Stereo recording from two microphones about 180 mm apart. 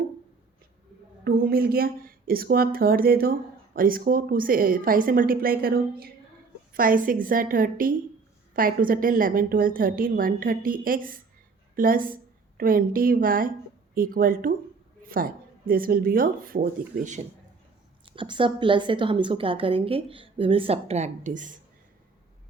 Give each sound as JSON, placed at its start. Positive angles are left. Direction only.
{"t": 1.2, "sound": "a woman's voice", "side_deg": -55}
{"t": 18.0, "sound": "a woman's voice", "side_deg": -30}